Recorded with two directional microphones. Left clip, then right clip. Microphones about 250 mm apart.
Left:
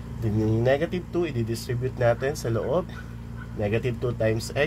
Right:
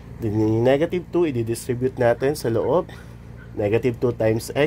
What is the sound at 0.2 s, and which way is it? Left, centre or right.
Speech, right.